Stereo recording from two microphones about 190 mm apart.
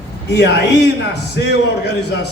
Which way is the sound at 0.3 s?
60° left (ahead or behind).